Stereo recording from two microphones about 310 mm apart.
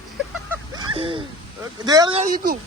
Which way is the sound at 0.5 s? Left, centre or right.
Centre.